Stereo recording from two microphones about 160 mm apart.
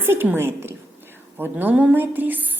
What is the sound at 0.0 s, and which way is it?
A woman's voice, 15° right (ahead or behind).